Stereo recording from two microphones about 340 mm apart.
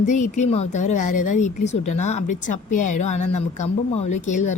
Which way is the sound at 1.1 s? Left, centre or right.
Left.